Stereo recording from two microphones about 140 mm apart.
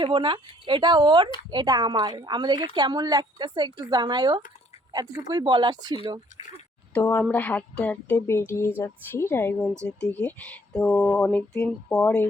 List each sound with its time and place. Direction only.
0.0 s a woman's voice: 35° right (ahead or behind)
6.9 s speech: 15° left (ahead or behind)